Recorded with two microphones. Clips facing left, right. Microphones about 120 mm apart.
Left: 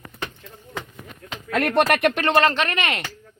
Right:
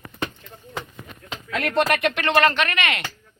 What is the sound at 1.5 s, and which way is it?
Speech, 55° left (ahead or behind).